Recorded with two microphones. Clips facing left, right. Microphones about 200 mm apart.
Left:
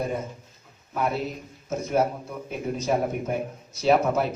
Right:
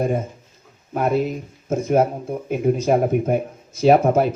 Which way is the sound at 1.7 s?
50° right (ahead or behind).